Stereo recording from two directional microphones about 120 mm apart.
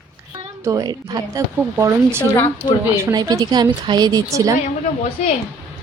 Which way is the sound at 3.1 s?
30° right (ahead or behind).